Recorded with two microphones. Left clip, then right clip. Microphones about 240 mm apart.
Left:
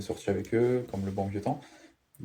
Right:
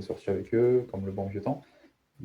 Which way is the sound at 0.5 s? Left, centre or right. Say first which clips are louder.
Right 4 dB; left.